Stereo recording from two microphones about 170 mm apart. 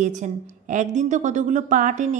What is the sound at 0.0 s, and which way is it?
A woman's voice, 45° right (ahead or behind).